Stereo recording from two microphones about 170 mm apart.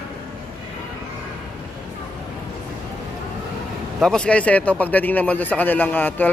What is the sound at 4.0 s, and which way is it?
Speech, 5° left (ahead or behind).